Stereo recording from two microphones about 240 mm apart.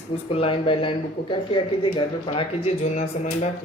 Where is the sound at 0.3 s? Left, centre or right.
Left.